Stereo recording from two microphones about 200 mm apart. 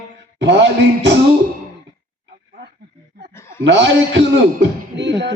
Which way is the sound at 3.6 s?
60° right (ahead or behind).